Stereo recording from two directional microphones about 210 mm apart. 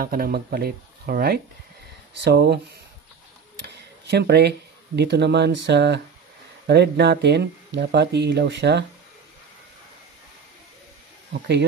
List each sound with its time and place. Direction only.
0.0 s speech: 45° right (ahead or behind)
3.6 s speech: 55° right (ahead or behind)